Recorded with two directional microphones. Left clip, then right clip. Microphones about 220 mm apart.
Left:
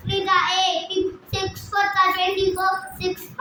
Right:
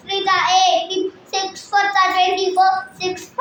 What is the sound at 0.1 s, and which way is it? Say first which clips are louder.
Child singing: right 4 dB; 10° left (ahead or behind).